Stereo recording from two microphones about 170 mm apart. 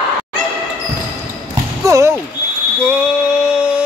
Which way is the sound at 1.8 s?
15° right (ahead or behind).